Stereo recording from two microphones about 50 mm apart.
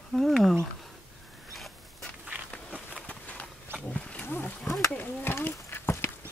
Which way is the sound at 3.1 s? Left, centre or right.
Left.